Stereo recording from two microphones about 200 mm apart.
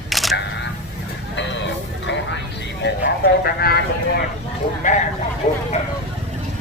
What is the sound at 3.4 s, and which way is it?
Speech, 50° left (ahead or behind).